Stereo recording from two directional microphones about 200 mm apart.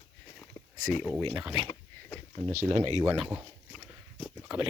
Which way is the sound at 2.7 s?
35° right (ahead or behind).